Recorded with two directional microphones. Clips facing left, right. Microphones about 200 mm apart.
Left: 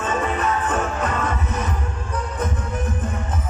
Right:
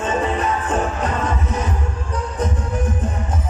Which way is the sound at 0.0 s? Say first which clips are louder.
Right 2 dB; 30° right (ahead or behind).